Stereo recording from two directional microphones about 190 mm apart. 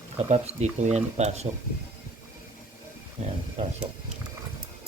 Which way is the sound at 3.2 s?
35° right (ahead or behind).